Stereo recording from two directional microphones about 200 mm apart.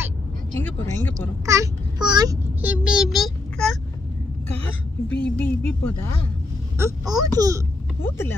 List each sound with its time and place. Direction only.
0.6 s speech: 10° left (ahead or behind)
1.4 s a child's voice: 15° right (ahead or behind); by 3.7 s centre (ahead or behind)
5.1 s speech: 5° left (ahead or behind)
6.8 s speech: 20° right (ahead or behind)